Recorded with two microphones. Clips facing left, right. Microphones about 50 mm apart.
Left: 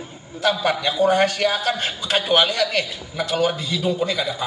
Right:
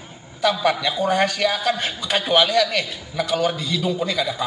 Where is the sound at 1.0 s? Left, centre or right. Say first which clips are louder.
Left 3 dB; centre.